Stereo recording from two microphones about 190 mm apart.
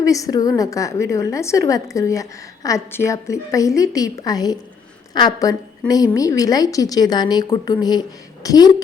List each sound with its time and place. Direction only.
0.0 s a woman's voice: 15° left (ahead or behind)